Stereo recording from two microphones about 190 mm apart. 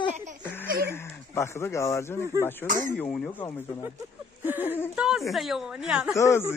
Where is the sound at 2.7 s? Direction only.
45° right (ahead or behind).